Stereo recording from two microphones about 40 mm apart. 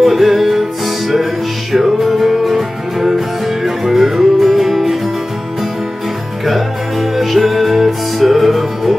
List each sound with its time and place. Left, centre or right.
0.0 s music: centre
6.4 s music: centre